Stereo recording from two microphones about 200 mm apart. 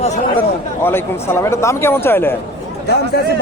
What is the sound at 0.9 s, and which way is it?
Speech, 10° left (ahead or behind).